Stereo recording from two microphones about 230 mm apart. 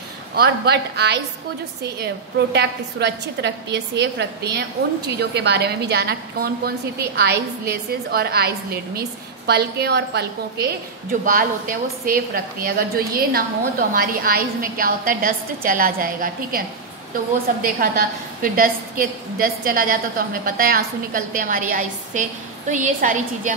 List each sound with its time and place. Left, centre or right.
0.4 s a woman's voice: right
2.5 s a woman's voice: right
9.5 s a woman's voice: right
18.4 s a woman's voice: right